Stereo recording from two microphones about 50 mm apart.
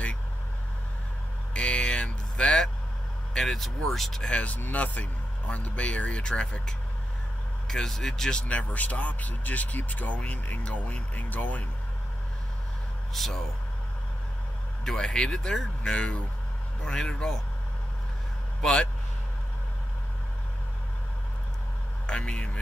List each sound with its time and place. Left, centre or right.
1.5 s vehicle: left
3.3 s speech: centre
4.2 s speech: left
4.6 s speech: left
13.1 s speech: centre
15.0 s speech: centre
18.6 s speech: centre
22.0 s speech: centre